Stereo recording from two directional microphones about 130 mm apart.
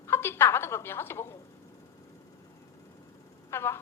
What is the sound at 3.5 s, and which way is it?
Speech, 20° left (ahead or behind).